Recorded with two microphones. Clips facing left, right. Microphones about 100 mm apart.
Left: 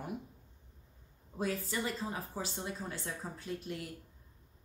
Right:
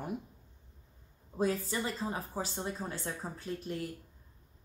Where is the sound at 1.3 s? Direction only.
30° right (ahead or behind).